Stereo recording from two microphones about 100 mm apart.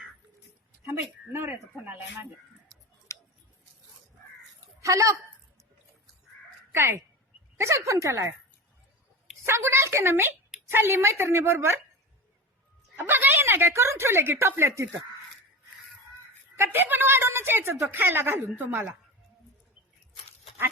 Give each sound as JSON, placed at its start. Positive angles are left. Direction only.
{"t": 0.9, "sound": "a woman's voice", "side_deg": -25}
{"t": 3.1, "sound": "scissors", "side_deg": 30}
{"t": 4.8, "sound": "speech", "side_deg": -30}
{"t": 6.7, "sound": "a woman's voice", "side_deg": -25}
{"t": 9.5, "sound": "a woman's voice", "side_deg": -25}
{"t": 13.0, "sound": "a woman's voice", "side_deg": -20}
{"t": 16.6, "sound": "a woman's voice", "side_deg": -20}